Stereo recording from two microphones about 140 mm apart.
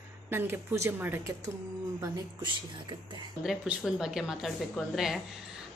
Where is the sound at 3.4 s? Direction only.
5° right (ahead or behind).